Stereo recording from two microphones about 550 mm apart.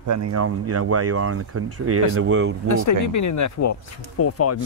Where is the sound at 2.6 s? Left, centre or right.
Left.